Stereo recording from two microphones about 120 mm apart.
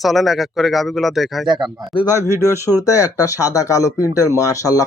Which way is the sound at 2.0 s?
20° right (ahead or behind).